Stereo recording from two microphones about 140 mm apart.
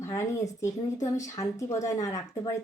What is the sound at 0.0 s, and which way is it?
Speech, 20° left (ahead or behind).